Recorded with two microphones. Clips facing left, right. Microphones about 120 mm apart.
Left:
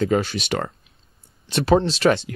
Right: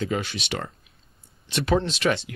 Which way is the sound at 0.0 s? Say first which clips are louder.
Left 7 dB; 45° left (ahead or behind).